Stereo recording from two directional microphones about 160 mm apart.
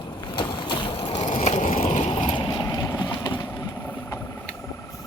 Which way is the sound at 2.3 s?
30° left (ahead or behind).